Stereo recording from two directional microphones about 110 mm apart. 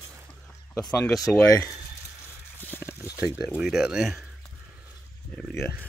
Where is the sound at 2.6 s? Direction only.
20° left (ahead or behind).